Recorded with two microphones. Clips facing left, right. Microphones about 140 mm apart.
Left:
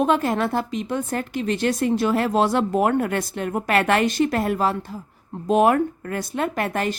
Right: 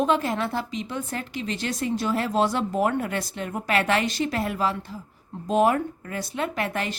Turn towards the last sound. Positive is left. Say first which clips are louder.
# left 4 dB
turn(degrees=45)  # may be behind; listen again after turning